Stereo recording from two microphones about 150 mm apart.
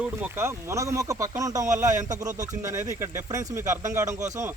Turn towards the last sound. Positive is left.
turn(degrees=-20)  # may be behind; listen again after turning